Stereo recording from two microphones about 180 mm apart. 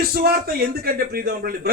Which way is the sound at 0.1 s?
55° right (ahead or behind).